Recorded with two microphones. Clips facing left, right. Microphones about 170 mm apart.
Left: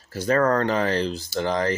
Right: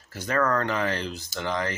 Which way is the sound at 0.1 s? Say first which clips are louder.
Left 5 dB; 30° left (ahead or behind).